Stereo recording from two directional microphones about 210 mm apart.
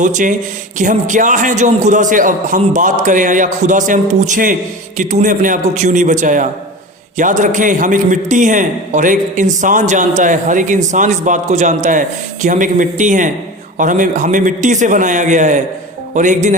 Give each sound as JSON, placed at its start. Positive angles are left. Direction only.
{"t": 0.0, "sound": "a man's voice", "side_deg": -35}